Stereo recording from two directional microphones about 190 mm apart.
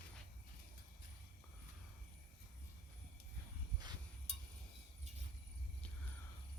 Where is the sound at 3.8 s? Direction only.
20° right (ahead or behind).